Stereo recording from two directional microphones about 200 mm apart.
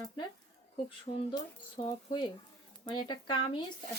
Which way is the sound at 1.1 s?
35° left (ahead or behind).